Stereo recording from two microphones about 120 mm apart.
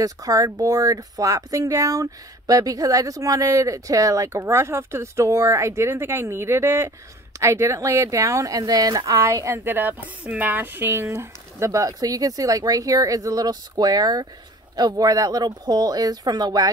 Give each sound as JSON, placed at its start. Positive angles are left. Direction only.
{"t": 0.0, "sound": "speech", "side_deg": -30}